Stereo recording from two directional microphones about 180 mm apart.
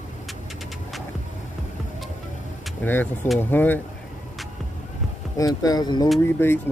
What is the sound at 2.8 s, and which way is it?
Speech, 10° left (ahead or behind).